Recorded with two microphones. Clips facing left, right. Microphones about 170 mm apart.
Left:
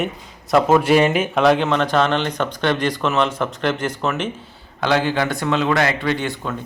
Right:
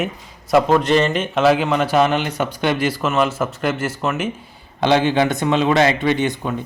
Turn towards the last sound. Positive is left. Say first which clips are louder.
# right 4 dB
turn(degrees=-20)  # may be behind; listen again after turning